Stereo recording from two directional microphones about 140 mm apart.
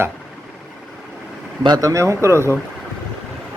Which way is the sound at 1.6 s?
25° right (ahead or behind).